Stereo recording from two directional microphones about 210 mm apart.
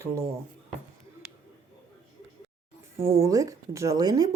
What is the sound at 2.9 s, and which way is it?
A woman's voice, 15° right (ahead or behind).